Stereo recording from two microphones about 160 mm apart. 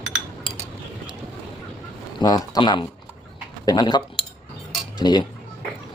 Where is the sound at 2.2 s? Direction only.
25° left (ahead or behind).